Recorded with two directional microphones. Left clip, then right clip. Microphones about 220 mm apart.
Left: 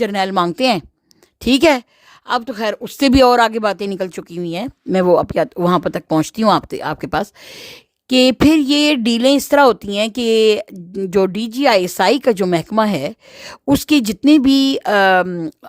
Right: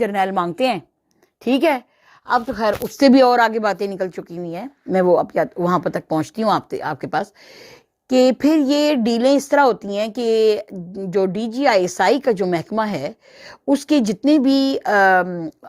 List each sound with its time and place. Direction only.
0.0 s speech: 40° left (ahead or behind)
2.3 s speech: 60° left (ahead or behind)
2.8 s speech: 45° left (ahead or behind)